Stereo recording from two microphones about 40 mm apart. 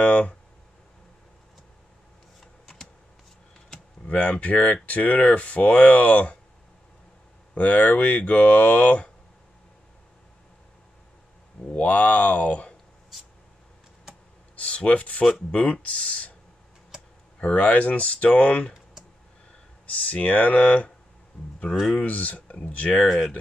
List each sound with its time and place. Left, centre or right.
0.0 s speech: left
4.1 s speech: left
7.5 s speech: left
11.7 s speech: left
14.5 s a sound: left
15.5 s speech: left
17.4 s speech: left
19.9 s speech: left
22.0 s speech: left